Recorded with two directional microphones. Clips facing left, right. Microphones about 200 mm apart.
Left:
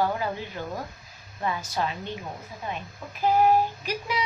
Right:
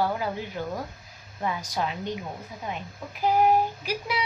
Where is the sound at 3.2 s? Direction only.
15° right (ahead or behind).